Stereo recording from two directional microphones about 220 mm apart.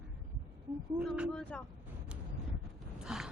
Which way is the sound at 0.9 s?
5° right (ahead or behind).